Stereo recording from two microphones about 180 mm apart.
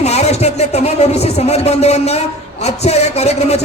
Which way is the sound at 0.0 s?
35° left (ahead or behind).